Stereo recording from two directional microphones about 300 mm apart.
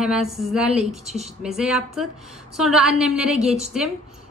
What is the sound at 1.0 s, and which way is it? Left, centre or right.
Speech, right.